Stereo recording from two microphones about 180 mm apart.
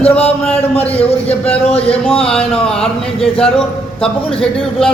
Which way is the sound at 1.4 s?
35° left (ahead or behind).